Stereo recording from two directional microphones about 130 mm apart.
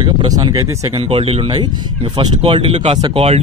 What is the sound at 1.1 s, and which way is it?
Speech, 50° right (ahead or behind).